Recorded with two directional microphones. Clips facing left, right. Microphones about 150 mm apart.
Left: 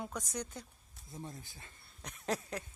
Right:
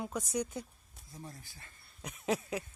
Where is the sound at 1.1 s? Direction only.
20° left (ahead or behind).